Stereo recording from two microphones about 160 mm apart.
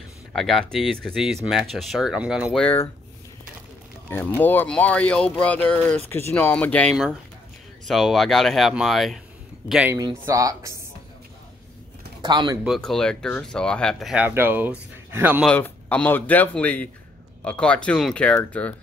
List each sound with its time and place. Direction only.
0.3 s speech: centre (ahead or behind)
4.4 s speech: 10° left (ahead or behind); by 9.9 s 5° right (ahead or behind)
9.9 s speech: 20° right (ahead or behind)
12.2 s speech: 25° right (ahead or behind)
12.6 s speech: centre (ahead or behind)
14.2 s speech: 10° right (ahead or behind)
15.4 s speech: 10° left (ahead or behind)